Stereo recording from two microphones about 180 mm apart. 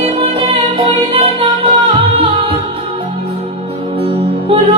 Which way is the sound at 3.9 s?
30° right (ahead or behind).